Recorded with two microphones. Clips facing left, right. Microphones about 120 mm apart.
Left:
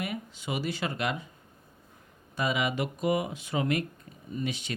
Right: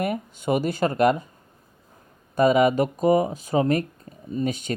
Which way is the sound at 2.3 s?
45° right (ahead or behind).